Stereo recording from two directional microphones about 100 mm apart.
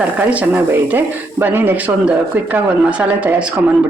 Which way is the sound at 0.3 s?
15° right (ahead or behind).